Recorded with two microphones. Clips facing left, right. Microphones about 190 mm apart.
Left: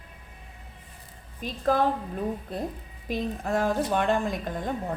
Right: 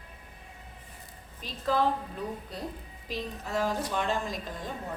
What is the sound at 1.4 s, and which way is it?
A woman's voice, 50° left (ahead or behind).